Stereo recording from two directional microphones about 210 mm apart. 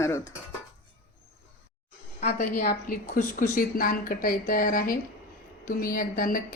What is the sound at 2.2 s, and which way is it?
A woman's voice, 35° left (ahead or behind).